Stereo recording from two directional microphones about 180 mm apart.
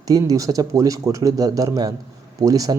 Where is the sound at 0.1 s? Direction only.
20° right (ahead or behind).